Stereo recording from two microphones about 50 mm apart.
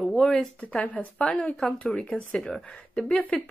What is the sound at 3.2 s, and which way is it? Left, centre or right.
Speech, left.